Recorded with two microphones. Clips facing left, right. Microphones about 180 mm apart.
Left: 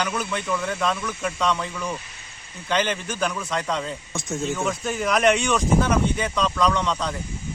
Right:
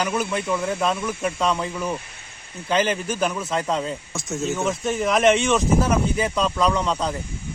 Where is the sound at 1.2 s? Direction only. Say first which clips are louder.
Even; 10° right (ahead or behind).